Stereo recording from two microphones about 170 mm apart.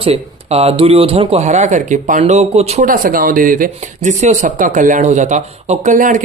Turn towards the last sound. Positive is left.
turn(degrees=-50)  # may be behind; listen again after turning